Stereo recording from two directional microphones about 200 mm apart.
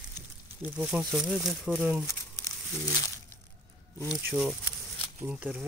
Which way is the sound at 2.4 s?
15° left (ahead or behind).